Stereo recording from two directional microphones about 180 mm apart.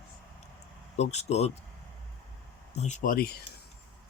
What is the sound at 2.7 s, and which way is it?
Speech, 40° left (ahead or behind).